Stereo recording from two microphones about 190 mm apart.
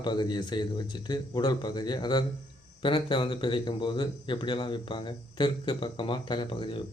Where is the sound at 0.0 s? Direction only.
25° left (ahead or behind).